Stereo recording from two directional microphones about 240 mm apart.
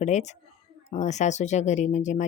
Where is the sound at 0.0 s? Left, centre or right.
Left.